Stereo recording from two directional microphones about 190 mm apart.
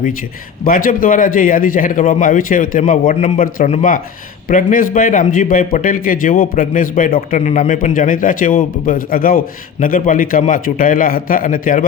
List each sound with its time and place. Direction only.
0.6 s a man's voice: 45° left (ahead or behind)